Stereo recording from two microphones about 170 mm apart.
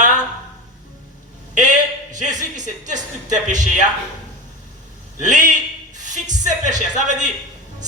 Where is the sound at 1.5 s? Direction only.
45° right (ahead or behind).